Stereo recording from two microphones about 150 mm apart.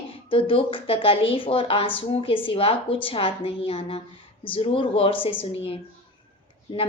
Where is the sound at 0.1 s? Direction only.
35° left (ahead or behind).